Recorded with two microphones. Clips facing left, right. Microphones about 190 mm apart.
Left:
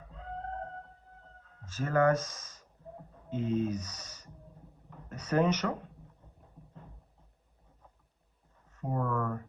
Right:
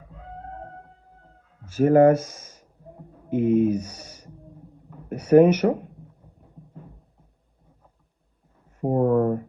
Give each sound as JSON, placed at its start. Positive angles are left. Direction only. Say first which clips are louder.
{"t": 1.6, "sound": "speech", "louder": "right 12 dB", "side_deg": -10}
{"t": 4.9, "sound": "a sound", "louder": "right 16 dB", "side_deg": -10}
{"t": 8.9, "sound": "speech", "louder": "right 13 dB", "side_deg": -30}